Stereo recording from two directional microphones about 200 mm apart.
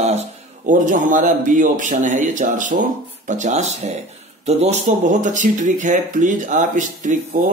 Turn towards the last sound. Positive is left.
turn(degrees=-40)  # may be behind; listen again after turning